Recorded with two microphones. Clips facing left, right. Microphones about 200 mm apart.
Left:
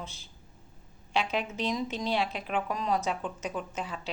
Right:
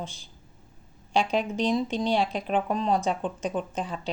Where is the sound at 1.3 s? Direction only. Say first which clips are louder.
Right 6 dB; 30° right (ahead or behind).